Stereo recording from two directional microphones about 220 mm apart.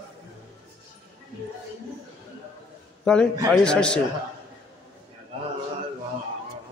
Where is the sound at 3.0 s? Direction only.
5° left (ahead or behind).